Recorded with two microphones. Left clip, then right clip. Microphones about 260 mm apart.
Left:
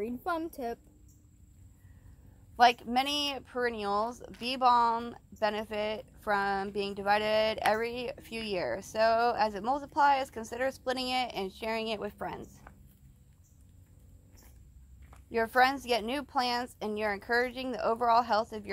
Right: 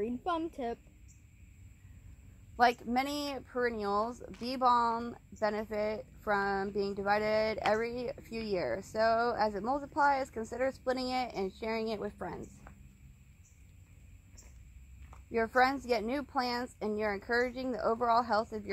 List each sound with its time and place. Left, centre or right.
0.0 s a woman's voice: centre
2.5 s a woman's voice: centre
15.3 s a woman's voice: centre